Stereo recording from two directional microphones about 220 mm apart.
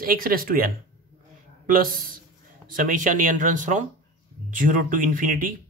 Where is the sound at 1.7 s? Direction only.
40° right (ahead or behind).